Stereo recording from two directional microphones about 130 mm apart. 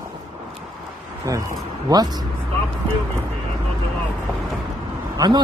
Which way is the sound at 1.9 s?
30° right (ahead or behind).